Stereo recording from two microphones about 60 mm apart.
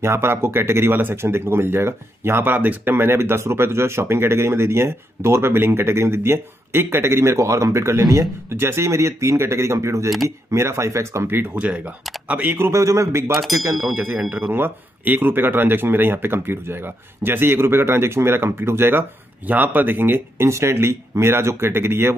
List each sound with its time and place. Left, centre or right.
0.0 s speech: right
8.0 s speech: right
8.5 s speech: right
11.2 s speech: right
11.6 s speech: right
12.5 s a man's voice: right
13.3 s speech: centre
13.9 s speech: right